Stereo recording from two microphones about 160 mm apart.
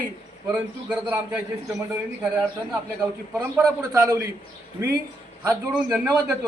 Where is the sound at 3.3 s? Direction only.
10° right (ahead or behind).